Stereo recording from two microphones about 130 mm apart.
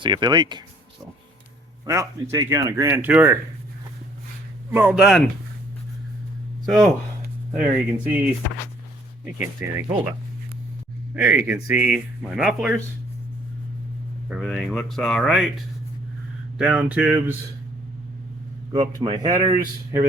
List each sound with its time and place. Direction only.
0.0 s a man's voice: 35° right (ahead or behind)
1.8 s a man's voice: 25° right (ahead or behind)
3.0 s speech: 10° right (ahead or behind)
4.7 s speech: 15° right (ahead or behind)
4.9 s speech: centre (ahead or behind)
6.7 s speech: centre (ahead or behind)
7.5 s speech: 10° right (ahead or behind)
9.7 s speech: 20° right (ahead or behind)
14.3 s speech: centre (ahead or behind)
18.7 s a man's voice: 35° right (ahead or behind)
19.3 s speech: 30° right (ahead or behind)